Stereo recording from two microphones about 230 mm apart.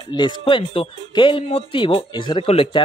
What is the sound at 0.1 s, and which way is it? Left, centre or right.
Speech, left.